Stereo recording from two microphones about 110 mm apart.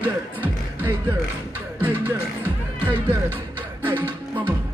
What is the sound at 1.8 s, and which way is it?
Speech, 15° right (ahead or behind).